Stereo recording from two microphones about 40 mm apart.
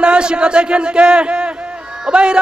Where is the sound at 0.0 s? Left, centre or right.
Right.